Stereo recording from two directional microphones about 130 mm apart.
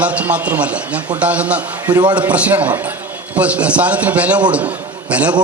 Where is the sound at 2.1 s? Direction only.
10° right (ahead or behind).